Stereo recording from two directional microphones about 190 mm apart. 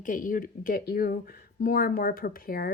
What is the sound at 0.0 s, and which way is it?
A woman's voice, 45° left (ahead or behind).